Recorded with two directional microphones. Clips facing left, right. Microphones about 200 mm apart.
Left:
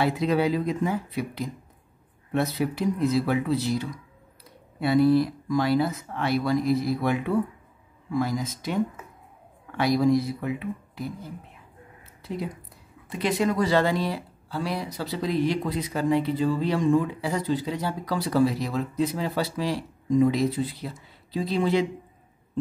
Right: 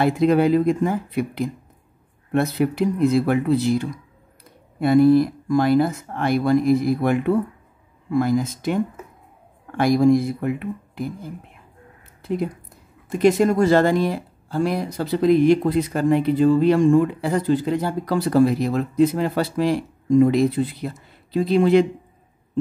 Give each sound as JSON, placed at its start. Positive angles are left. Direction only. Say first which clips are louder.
{"t": 0.0, "sound": "speech", "louder": "right 6 dB", "side_deg": -50}
{"t": 12.2, "sound": "a sound", "louder": "right 8 dB", "side_deg": -50}
{"t": 13.1, "sound": "speech", "louder": "right 8 dB", "side_deg": -45}